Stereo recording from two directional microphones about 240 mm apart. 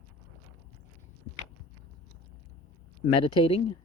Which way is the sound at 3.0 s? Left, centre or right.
Left.